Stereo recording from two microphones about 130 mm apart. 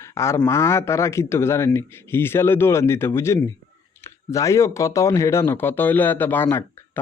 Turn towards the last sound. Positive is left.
turn(degrees=15)  # may be behind; listen again after turning